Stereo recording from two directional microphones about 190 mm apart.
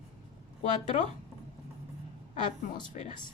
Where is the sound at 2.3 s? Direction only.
40° left (ahead or behind).